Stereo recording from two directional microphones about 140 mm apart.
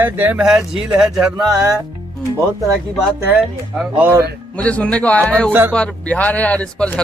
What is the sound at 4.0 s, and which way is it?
Speech, 20° right (ahead or behind).